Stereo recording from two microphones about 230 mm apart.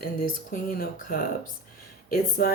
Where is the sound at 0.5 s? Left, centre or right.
Left.